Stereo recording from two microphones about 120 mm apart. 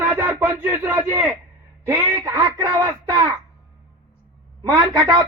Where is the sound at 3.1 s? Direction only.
30° right (ahead or behind).